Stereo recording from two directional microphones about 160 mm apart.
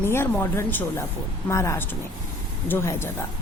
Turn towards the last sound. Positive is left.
turn(degrees=15)  # may be behind; listen again after turning